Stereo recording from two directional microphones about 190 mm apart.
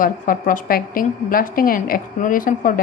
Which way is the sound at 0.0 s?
45° left (ahead or behind).